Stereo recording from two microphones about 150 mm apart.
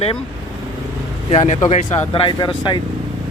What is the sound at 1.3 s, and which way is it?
Speech, 50° left (ahead or behind).